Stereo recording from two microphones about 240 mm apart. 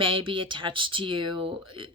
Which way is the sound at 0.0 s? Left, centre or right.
Right.